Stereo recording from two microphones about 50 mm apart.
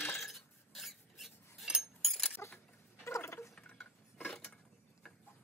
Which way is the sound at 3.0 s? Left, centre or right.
Left.